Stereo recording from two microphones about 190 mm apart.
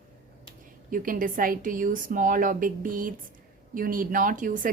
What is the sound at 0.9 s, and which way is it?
Speech, 45° right (ahead or behind).